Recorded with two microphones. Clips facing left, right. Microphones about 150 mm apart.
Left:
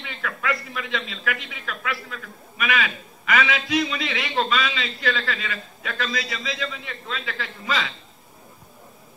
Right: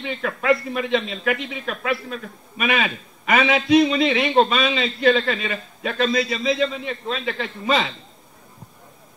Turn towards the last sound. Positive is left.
turn(degrees=-25)  # may be behind; listen again after turning